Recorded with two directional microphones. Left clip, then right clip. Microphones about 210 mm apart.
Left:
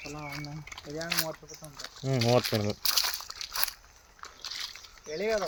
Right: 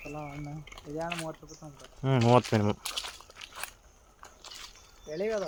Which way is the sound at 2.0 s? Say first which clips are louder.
Right 2 dB; 25° right (ahead or behind).